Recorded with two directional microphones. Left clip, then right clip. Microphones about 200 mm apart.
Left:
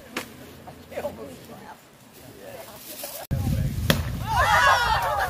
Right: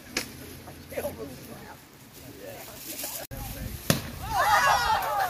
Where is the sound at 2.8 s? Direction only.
55° left (ahead or behind).